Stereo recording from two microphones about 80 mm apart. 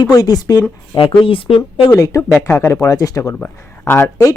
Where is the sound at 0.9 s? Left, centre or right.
Left.